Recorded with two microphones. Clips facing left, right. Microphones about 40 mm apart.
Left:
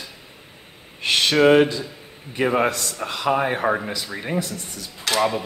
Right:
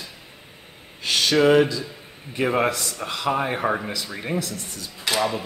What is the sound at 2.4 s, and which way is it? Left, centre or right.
Speech, centre.